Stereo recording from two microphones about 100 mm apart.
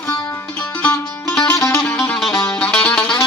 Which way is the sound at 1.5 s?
30° left (ahead or behind).